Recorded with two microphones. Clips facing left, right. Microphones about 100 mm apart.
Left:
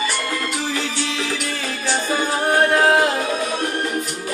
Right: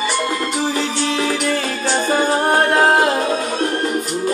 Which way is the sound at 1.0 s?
40° right (ahead or behind).